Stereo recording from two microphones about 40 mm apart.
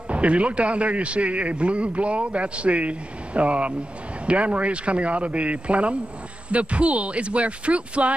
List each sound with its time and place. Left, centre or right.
0.1 s a man's voice: right